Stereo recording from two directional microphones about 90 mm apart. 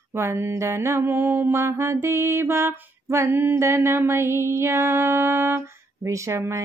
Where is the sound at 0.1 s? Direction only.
30° right (ahead or behind).